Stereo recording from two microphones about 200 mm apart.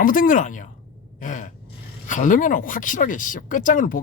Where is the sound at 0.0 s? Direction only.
45° left (ahead or behind).